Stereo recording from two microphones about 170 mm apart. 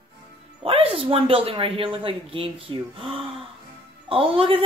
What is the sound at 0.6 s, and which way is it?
Speech, 35° right (ahead or behind).